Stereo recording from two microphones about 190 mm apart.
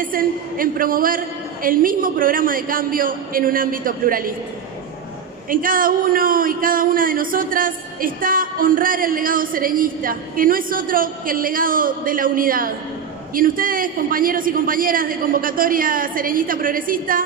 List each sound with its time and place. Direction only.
0.0 s a man's voice: 50° right (ahead or behind)
5.5 s a man's voice: 45° right (ahead or behind)